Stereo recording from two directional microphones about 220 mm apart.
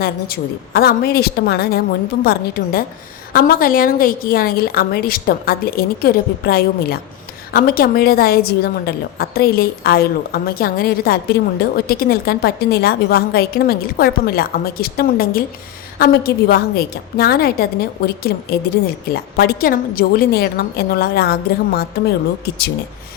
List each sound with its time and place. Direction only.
0.0 s a woman's voice: 45° left (ahead or behind)